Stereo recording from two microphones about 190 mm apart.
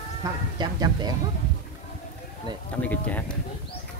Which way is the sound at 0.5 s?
20° right (ahead or behind).